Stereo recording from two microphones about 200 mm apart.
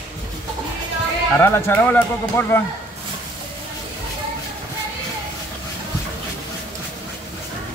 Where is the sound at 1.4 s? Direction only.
10° left (ahead or behind).